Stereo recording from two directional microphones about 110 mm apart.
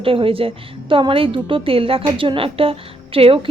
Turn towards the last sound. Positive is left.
turn(degrees=-60)  # may be behind; listen again after turning